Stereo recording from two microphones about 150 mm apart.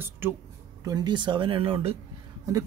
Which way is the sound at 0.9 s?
30° right (ahead or behind).